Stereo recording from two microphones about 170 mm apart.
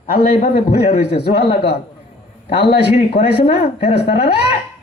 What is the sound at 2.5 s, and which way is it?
Speech, 70° left (ahead or behind).